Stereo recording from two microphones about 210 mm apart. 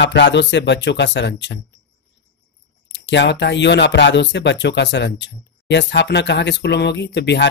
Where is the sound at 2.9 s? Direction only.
55° left (ahead or behind).